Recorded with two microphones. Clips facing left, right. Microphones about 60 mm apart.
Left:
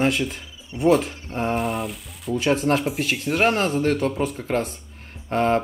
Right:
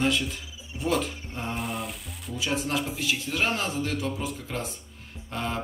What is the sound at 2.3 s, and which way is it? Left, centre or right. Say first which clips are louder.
Speech: left 8 dB; left.